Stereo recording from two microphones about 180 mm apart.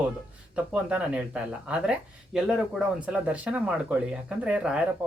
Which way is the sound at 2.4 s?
Centre (ahead or behind).